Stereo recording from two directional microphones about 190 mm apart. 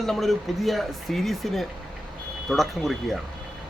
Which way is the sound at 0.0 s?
Centre (ahead or behind).